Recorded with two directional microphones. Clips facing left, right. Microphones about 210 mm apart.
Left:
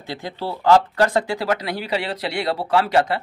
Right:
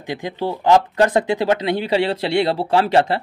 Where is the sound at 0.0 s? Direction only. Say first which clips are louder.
Right 5 dB; 15° right (ahead or behind).